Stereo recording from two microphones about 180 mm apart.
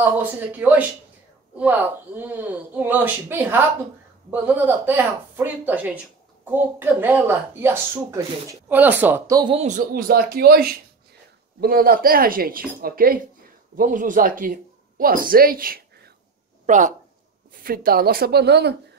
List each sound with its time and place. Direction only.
0.0 s speech: 10° right (ahead or behind)
9.4 s speech: 30° right (ahead or behind)
9.7 s speech: 50° right (ahead or behind)
17.6 s speech: 55° right (ahead or behind)